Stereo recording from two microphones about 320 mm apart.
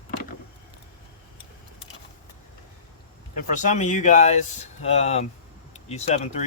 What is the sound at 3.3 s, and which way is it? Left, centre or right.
Speech, left.